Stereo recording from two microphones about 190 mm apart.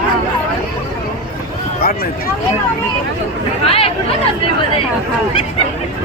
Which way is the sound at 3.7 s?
30° left (ahead or behind).